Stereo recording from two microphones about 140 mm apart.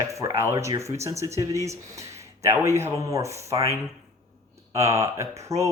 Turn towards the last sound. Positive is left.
turn(degrees=-20)  # may be behind; listen again after turning